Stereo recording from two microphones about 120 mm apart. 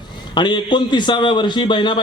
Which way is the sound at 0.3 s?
40° left (ahead or behind).